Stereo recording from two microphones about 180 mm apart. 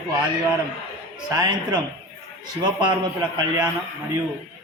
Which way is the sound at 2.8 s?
20° right (ahead or behind).